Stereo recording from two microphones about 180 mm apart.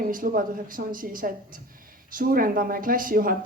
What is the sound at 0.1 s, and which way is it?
Speech, 50° right (ahead or behind).